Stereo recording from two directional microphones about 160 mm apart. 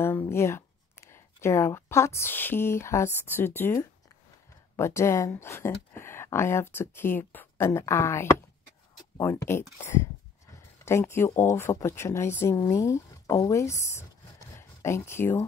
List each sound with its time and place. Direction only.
0.0 s speech: 15° left (ahead or behind)